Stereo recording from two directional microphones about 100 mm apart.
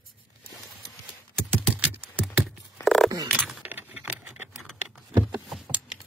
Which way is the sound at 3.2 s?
10° right (ahead or behind).